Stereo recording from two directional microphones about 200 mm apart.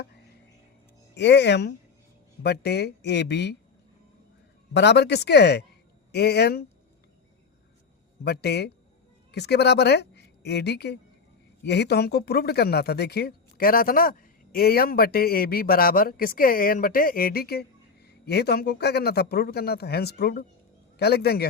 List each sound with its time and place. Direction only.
1.1 s speech: 60° left (ahead or behind)
4.7 s speech: 60° left (ahead or behind)
8.2 s a woman's voice: 55° left (ahead or behind)